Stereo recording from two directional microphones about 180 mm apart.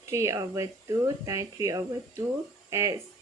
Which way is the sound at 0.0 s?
15° right (ahead or behind).